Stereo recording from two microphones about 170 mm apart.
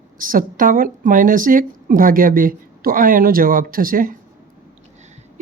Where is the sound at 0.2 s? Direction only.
55° right (ahead or behind).